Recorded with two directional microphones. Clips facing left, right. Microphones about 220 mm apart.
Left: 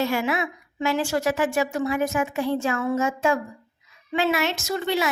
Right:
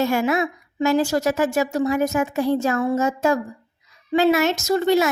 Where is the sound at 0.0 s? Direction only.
45° right (ahead or behind).